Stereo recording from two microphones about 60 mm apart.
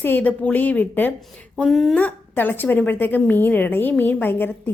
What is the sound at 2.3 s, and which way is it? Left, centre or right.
A woman's voice, left.